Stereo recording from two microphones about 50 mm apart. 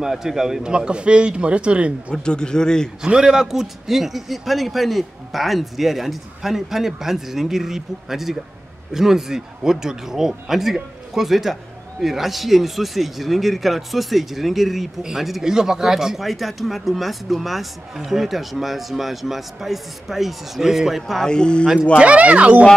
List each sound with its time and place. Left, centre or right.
0.0 s a man's voice: centre
2.1 s a man's voice: centre
3.0 s speech: centre
21.2 s a man's voice: centre
21.9 s a man's voice: right